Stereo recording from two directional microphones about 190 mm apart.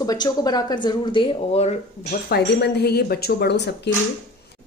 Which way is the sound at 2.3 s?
60° left (ahead or behind).